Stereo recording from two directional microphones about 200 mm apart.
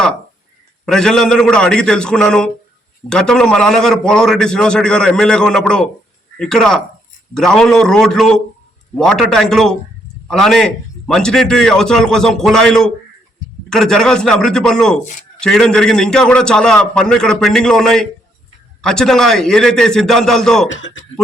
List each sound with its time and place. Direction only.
0.9 s a man's voice: 5° left (ahead or behind)
20.7 s speech: 65° left (ahead or behind)